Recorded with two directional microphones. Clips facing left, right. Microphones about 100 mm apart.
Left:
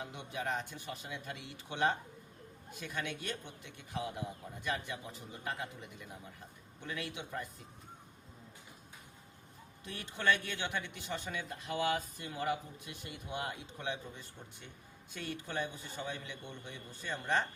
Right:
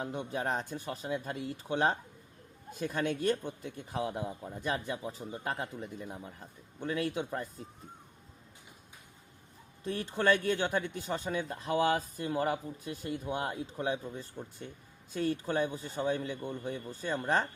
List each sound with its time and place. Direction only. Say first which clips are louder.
0.0 s speech: right 6 dB; 40° right (ahead or behind)
9.8 s speech: right 5 dB; 35° right (ahead or behind)